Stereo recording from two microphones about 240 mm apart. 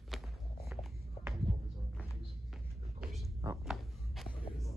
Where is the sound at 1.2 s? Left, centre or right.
Left.